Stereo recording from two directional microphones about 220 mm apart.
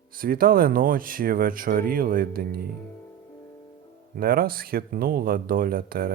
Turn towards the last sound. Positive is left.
turn(degrees=-40)  # may be behind; listen again after turning